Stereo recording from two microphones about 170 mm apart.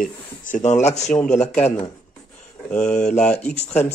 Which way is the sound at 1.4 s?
40° left (ahead or behind).